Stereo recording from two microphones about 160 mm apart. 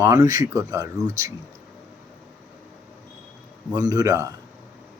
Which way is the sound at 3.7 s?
25° right (ahead or behind).